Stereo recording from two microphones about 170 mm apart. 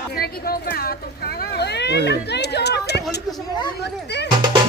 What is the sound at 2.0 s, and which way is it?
Chatter, 80° left.